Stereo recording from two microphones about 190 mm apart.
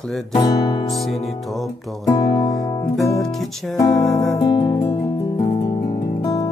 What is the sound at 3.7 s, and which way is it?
Music, 15° left (ahead or behind).